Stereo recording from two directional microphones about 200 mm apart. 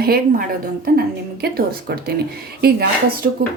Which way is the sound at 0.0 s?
50° right (ahead or behind).